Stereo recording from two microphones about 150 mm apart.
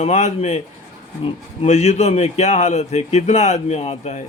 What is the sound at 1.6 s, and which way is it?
Speech, 50° left (ahead or behind).